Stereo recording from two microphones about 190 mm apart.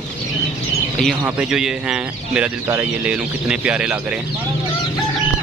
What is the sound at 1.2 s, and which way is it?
Speech, 5° right (ahead or behind).